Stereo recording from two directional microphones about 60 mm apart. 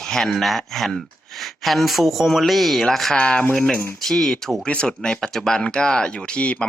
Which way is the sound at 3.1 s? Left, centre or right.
Centre.